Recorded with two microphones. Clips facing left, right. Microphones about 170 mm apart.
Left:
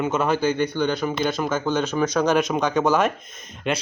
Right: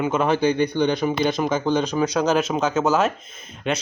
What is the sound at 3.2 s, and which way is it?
Speech, 50° left (ahead or behind).